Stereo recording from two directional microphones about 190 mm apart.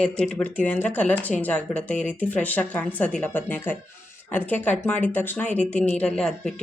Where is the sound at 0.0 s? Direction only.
5° left (ahead or behind).